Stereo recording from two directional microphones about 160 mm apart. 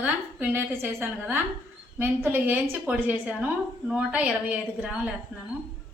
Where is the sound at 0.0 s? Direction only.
10° right (ahead or behind).